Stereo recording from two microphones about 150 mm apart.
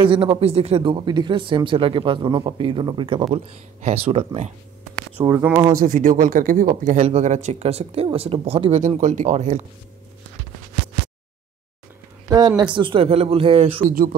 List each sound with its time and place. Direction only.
0.0 s speech: 35° right (ahead or behind)
3.4 s speech: 45° right (ahead or behind)
5.2 s speech: 20° right (ahead or behind)
5.8 s speech: 65° right (ahead or behind)
7.0 s speech: 45° right (ahead or behind)
8.7 s speech: 55° right (ahead or behind)
12.3 s speech: 25° right (ahead or behind)
13.8 s speech: 65° right (ahead or behind)